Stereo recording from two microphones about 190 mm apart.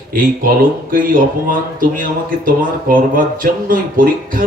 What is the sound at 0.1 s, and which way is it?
Speech, 50° right (ahead or behind).